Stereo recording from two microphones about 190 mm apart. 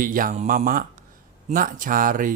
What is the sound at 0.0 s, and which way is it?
Speech, 45° right (ahead or behind).